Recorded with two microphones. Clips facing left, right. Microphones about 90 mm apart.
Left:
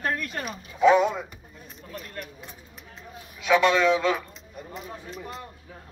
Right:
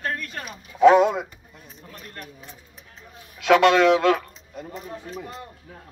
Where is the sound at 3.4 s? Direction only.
75° right (ahead or behind).